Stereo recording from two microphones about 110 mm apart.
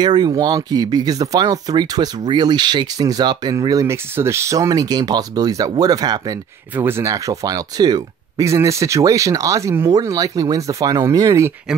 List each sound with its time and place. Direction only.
0.0 s speech: 40° right (ahead or behind)
6.7 s speech: 20° right (ahead or behind)